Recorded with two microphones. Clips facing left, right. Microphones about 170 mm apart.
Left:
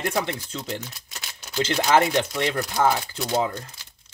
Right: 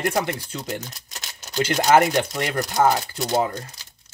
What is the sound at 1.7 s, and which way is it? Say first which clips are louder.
Speech: right 3 dB; 45° right (ahead or behind).